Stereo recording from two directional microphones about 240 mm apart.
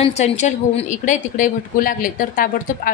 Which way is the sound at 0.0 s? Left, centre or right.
Left.